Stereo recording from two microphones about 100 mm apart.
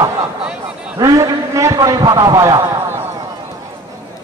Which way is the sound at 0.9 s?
35° right (ahead or behind).